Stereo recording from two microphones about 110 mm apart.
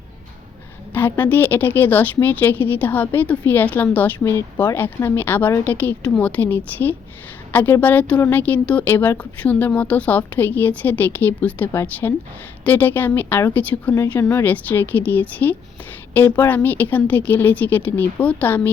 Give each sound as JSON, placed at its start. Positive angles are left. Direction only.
{"t": 0.9, "sound": "speech", "side_deg": 20}
{"t": 4.2, "sound": "speech", "side_deg": 25}